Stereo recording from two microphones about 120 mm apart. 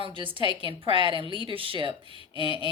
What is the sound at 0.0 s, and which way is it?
A woman's voice, 45° right (ahead or behind).